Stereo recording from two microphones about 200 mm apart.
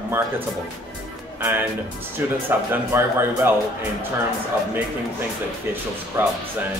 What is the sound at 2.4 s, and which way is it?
Speech, 10° right (ahead or behind).